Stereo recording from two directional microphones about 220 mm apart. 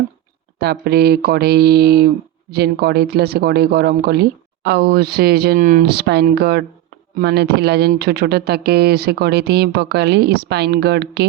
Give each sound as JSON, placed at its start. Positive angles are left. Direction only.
{"t": 0.6, "sound": "speech", "side_deg": -45}